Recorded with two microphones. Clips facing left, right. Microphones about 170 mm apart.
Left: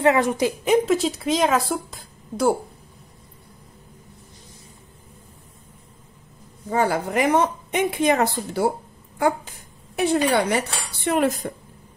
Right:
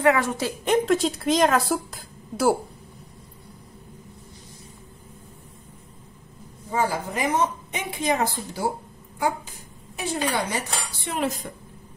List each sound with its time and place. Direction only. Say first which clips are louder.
0.0 s a woman's voice: left 3 dB; 20° left (ahead or behind)
0.8 s speech: left 1 dB; centre (ahead or behind)
6.7 s a woman's voice: left 4 dB; 65° left (ahead or behind)
9.9 s a woman's voice: left 7 dB; 65° left (ahead or behind)